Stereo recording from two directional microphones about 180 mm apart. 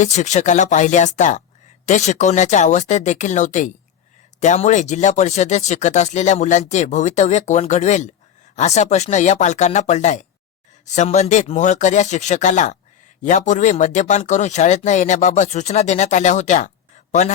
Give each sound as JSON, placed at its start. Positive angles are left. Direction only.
{"t": 0.0, "sound": "speech", "side_deg": 40}